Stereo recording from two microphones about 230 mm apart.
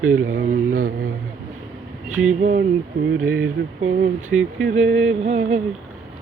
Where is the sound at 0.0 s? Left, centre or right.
Right.